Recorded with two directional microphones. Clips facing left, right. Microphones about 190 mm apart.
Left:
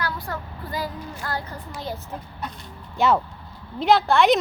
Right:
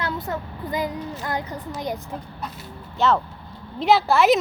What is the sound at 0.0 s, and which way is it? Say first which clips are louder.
Speech: right 2 dB; 20° right (ahead or behind).